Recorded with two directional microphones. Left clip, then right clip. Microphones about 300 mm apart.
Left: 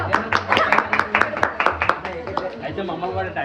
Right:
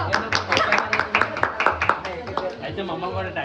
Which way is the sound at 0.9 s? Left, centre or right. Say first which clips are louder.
Left 2 dB; centre.